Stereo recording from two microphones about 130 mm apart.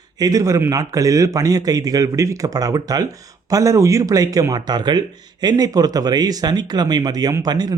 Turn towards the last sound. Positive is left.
turn(degrees=-30)  # may be behind; listen again after turning